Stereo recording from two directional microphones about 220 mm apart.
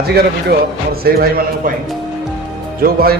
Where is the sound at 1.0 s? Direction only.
45° right (ahead or behind).